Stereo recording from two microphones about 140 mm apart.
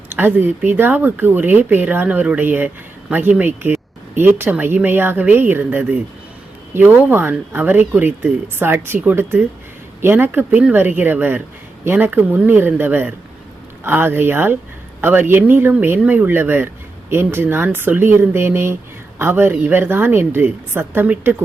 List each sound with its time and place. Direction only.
0.1 s speech: 15° right (ahead or behind)